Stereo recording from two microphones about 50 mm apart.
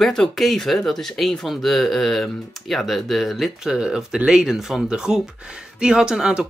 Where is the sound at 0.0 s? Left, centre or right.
Centre.